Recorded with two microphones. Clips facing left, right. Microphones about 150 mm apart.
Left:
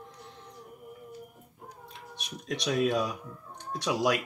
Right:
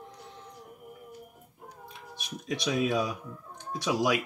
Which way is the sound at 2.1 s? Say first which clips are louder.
Right 1 dB; centre (ahead or behind).